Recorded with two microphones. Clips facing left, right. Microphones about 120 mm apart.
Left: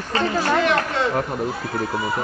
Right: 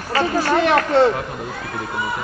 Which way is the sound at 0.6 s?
40° right (ahead or behind).